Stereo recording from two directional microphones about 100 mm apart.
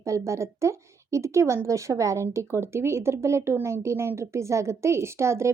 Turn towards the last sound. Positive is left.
turn(degrees=-30)  # may be behind; listen again after turning